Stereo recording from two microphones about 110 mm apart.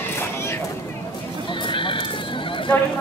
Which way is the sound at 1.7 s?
50° left (ahead or behind).